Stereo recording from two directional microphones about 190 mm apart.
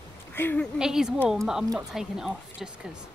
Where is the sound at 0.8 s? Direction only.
Centre (ahead or behind).